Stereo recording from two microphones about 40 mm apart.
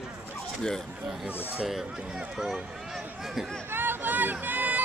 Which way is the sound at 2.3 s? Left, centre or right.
Centre.